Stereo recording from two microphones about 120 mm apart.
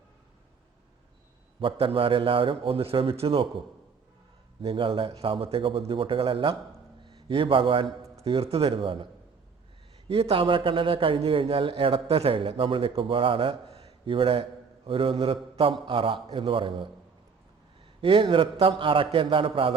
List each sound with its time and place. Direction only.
1.5 s a man's voice: 45° right (ahead or behind)
4.6 s a man's voice: 50° right (ahead or behind)
10.1 s a man's voice: 50° right (ahead or behind)
18.0 s a man's voice: 45° right (ahead or behind)